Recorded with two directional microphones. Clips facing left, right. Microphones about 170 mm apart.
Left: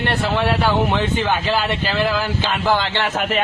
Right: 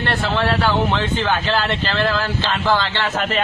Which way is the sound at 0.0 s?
15° left (ahead or behind).